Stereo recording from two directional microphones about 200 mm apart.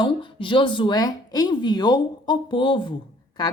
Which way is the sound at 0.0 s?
25° left (ahead or behind).